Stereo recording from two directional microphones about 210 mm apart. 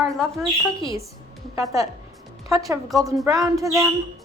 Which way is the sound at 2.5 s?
15° right (ahead or behind).